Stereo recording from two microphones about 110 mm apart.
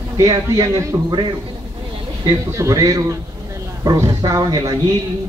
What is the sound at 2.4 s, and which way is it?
A man's voice, 25° right (ahead or behind).